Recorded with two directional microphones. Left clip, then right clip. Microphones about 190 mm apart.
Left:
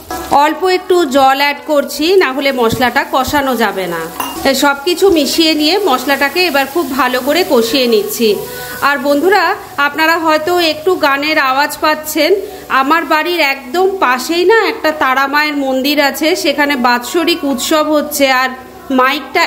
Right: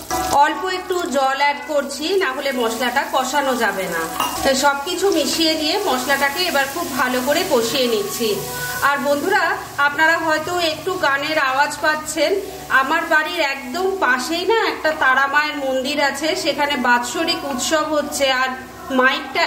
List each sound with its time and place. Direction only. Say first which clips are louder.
0.4 s a woman's voice: left 7 dB; 45° left (ahead or behind)